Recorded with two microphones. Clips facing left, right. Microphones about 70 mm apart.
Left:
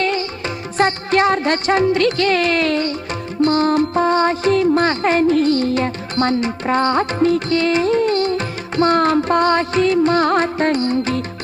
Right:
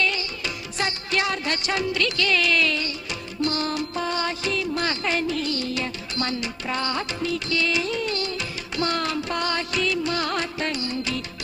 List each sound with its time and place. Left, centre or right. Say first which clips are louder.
0.0 s music: left 6 dB; left